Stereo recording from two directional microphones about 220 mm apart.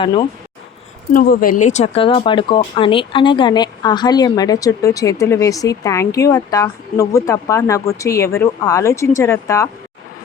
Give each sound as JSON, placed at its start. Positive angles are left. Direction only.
{"t": 0.0, "sound": "speech", "side_deg": 20}
{"t": 1.1, "sound": "a woman's voice", "side_deg": 40}